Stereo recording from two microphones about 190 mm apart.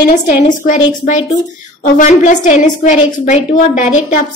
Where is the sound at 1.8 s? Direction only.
40° left (ahead or behind).